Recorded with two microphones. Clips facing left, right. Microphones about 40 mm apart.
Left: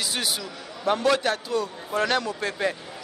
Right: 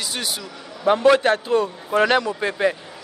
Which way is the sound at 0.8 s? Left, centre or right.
Right.